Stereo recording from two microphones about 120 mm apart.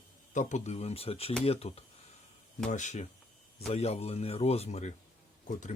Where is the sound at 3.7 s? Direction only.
60° left (ahead or behind).